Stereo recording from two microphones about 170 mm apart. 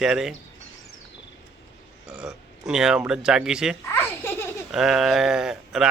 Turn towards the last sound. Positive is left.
turn(degrees=-5)  # may be behind; listen again after turning